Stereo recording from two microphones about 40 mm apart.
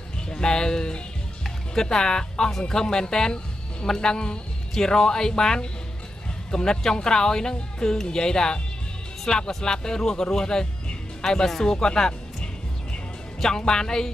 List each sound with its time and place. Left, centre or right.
0.3 s speech: centre
13.4 s speech: centre